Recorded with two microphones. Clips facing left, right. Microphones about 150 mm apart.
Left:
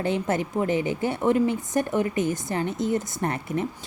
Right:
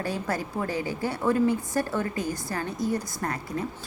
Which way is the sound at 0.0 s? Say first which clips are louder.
Left 5 dB; 20° left (ahead or behind).